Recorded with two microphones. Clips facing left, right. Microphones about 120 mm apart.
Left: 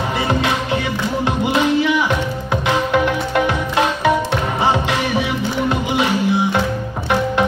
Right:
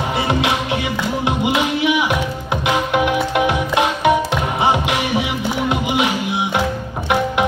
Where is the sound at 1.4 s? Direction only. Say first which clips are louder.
Left 3 dB; 15° right (ahead or behind).